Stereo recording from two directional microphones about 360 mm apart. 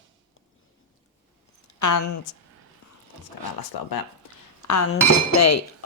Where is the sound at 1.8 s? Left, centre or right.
Left.